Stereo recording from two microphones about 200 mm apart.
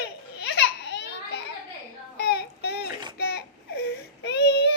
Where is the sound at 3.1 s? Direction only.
55° left (ahead or behind).